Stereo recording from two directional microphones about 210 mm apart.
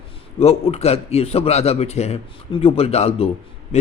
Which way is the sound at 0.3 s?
30° left (ahead or behind).